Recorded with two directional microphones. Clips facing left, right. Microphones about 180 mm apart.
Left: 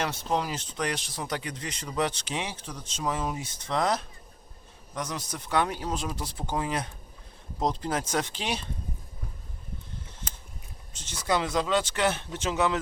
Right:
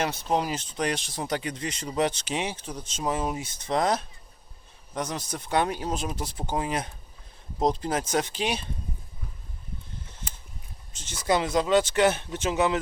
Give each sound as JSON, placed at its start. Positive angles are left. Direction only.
{"t": 0.0, "sound": "speech", "side_deg": -20}
{"t": 4.9, "sound": "speech", "side_deg": -25}
{"t": 11.3, "sound": "speech", "side_deg": -20}